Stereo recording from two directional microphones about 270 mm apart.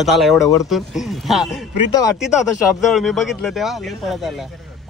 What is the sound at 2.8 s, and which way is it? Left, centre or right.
Speech, centre.